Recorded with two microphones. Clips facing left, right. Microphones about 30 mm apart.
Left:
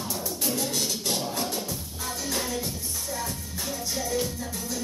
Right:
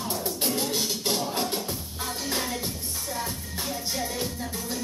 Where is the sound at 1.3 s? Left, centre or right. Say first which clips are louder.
Right 2 dB; right.